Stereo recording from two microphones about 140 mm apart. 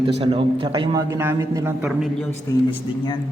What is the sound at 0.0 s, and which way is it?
Speech, 45° right (ahead or behind).